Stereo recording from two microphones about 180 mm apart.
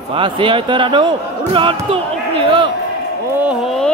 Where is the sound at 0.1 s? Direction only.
30° right (ahead or behind).